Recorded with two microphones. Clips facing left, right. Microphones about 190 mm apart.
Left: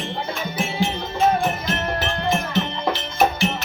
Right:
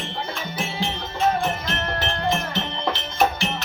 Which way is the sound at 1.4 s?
10° left (ahead or behind).